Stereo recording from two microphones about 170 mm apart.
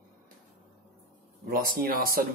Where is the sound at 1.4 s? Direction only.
55° right (ahead or behind).